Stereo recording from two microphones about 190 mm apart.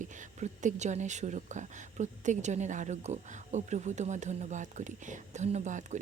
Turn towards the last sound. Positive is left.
turn(degrees=-40)  # may be behind; listen again after turning